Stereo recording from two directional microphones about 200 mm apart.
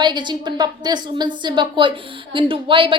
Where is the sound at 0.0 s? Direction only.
20° right (ahead or behind).